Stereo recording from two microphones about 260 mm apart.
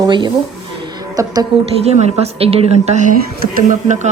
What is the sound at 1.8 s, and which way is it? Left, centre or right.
Speech, right.